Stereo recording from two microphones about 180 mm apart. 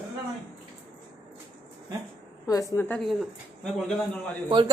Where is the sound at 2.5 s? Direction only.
20° left (ahead or behind).